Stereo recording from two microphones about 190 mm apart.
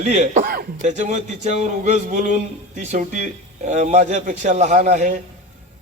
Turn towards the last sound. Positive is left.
turn(degrees=-40)  # may be behind; listen again after turning